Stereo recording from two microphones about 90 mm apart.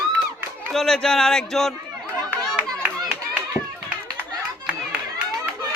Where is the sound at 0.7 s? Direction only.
5° left (ahead or behind).